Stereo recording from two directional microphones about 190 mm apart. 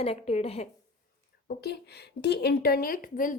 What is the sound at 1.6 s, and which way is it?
A woman's voice, 60° left (ahead or behind).